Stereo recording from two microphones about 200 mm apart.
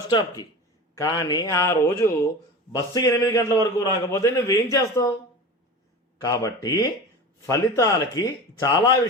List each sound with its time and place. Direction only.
0.1 s speech: 20° left (ahead or behind)
6.2 s speech: 15° left (ahead or behind)